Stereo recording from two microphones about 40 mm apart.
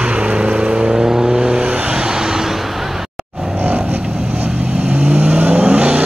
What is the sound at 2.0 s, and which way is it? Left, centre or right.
Vehicle, centre.